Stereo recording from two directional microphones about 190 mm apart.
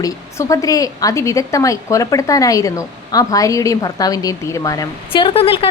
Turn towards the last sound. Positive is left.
turn(degrees=30)  # may be behind; listen again after turning